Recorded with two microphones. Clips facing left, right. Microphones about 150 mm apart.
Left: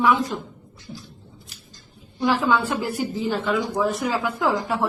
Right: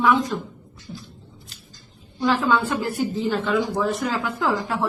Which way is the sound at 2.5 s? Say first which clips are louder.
Even; 15° left (ahead or behind).